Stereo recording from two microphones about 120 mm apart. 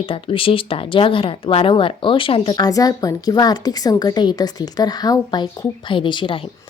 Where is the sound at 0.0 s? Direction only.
50° left (ahead or behind).